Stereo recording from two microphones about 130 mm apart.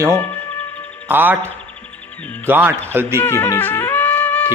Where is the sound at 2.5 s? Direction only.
15° right (ahead or behind).